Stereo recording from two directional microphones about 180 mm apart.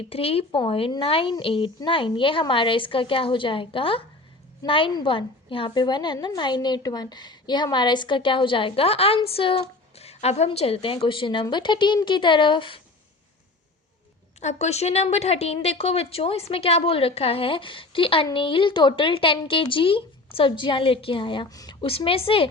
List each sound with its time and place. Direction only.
0.1 s a woman's voice: 30° left (ahead or behind)
14.4 s a woman's voice: 40° left (ahead or behind)